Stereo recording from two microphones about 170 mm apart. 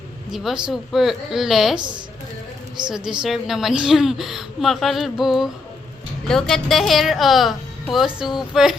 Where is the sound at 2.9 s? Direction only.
5° right (ahead or behind).